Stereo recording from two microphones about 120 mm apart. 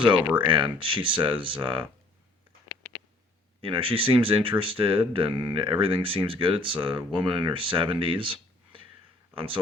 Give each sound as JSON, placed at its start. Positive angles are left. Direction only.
{"t": 0.1, "sound": "speech", "side_deg": -40}
{"t": 3.6, "sound": "speech", "side_deg": -50}